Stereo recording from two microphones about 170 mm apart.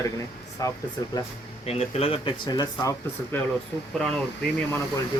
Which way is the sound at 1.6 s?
35° left (ahead or behind).